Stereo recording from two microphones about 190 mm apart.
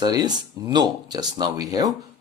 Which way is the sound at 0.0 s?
20° right (ahead or behind).